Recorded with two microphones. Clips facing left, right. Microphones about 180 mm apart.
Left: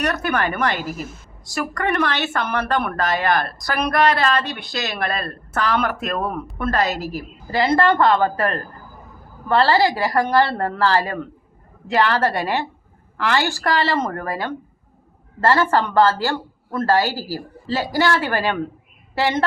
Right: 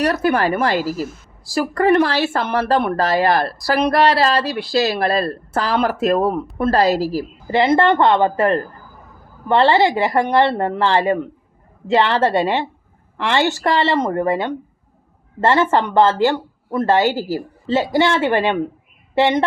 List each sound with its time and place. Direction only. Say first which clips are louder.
0.0 s speech: right 5 dB; 30° right (ahead or behind)
7.4 s speech: right 3 dB; 20° right (ahead or behind)